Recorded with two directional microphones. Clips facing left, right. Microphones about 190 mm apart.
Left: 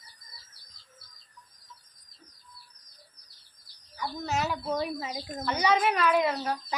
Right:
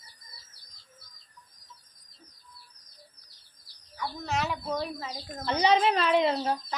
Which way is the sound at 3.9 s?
5° left (ahead or behind).